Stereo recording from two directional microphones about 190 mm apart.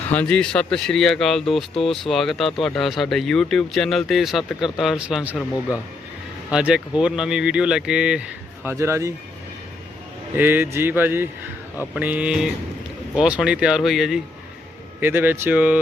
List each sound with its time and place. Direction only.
0.1 s speech: 5° left (ahead or behind)
5.4 s speech: 15° left (ahead or behind)
6.5 s speech: 5° right (ahead or behind)
10.3 s speech: 10° right (ahead or behind)